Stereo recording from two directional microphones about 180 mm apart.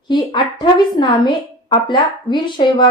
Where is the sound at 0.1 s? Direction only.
25° left (ahead or behind).